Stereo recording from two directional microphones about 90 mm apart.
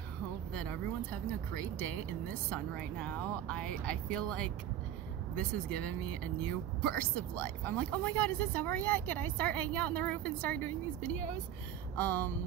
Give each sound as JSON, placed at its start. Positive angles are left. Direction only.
{"t": 0.5, "sound": "a woman's voice", "side_deg": 10}